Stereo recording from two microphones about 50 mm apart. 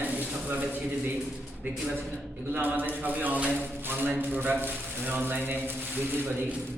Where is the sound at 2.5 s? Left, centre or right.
Right.